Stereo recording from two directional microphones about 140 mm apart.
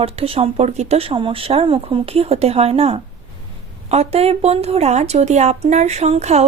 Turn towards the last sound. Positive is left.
turn(degrees=-50)  # may be behind; listen again after turning